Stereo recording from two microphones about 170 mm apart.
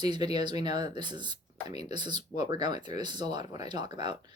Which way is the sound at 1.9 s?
25° right (ahead or behind).